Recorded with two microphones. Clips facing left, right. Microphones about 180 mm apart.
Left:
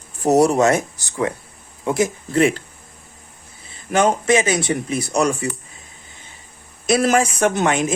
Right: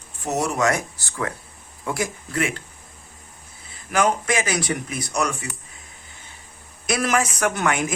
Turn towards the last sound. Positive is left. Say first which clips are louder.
# left 4 dB
turn(degrees=25)  # may be behind; listen again after turning